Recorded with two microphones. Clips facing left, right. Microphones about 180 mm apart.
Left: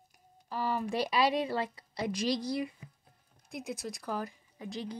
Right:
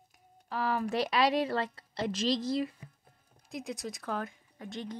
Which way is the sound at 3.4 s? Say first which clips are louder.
Right 1 dB; centre (ahead or behind).